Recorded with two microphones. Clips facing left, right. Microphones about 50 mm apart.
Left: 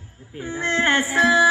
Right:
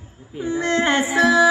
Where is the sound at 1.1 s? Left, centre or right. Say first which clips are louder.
Right 1 dB; left.